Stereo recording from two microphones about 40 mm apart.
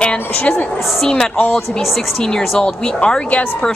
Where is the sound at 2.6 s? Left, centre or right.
Left.